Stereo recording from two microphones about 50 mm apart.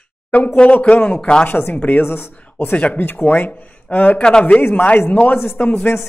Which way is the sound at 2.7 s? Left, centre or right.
Left.